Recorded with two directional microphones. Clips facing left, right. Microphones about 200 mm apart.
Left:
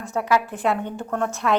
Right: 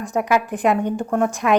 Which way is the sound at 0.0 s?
15° right (ahead or behind).